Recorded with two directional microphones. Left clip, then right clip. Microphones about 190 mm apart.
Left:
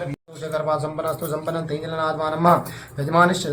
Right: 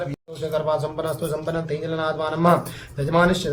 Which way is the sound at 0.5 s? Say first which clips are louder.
Even; 30° right (ahead or behind).